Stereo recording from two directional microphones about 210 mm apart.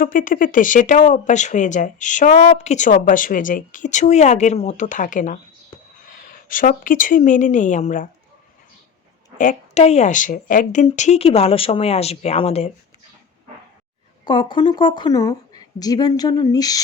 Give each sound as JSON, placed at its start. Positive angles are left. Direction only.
{"t": 0.0, "sound": "a woman's voice", "side_deg": 40}
{"t": 9.4, "sound": "speech", "side_deg": 35}
{"t": 14.3, "sound": "a woman's voice", "side_deg": 20}